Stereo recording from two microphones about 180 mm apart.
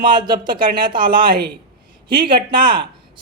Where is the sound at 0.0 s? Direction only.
25° right (ahead or behind).